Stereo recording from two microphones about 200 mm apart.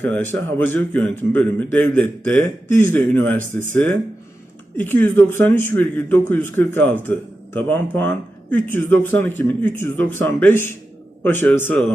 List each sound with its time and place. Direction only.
0.0 s a man's voice: 10° left (ahead or behind)
4.8 s a man's voice: 10° left (ahead or behind)